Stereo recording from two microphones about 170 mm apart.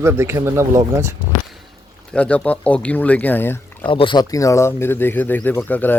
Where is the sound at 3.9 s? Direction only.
30° left (ahead or behind); by 5.9 s 10° left (ahead or behind).